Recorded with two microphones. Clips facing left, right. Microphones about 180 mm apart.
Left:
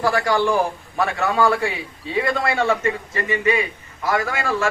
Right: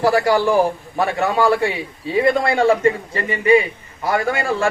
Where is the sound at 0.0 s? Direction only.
30° right (ahead or behind).